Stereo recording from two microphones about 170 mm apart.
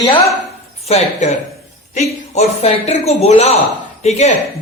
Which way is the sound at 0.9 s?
40° left (ahead or behind).